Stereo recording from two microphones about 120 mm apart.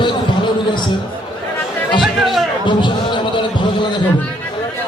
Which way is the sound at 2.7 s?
40° left (ahead or behind).